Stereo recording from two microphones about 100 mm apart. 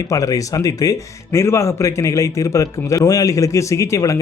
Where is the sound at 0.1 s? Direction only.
35° left (ahead or behind).